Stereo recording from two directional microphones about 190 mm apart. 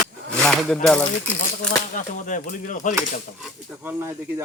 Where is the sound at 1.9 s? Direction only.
45° left (ahead or behind).